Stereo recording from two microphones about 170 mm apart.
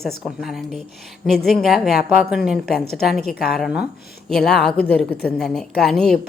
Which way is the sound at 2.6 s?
65° left (ahead or behind).